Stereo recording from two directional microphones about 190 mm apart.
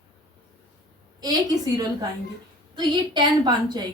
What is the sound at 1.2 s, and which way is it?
A woman's voice, 20° right (ahead or behind).